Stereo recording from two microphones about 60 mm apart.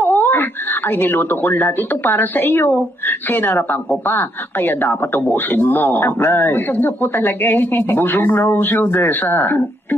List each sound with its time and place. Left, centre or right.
0.0 s speech: left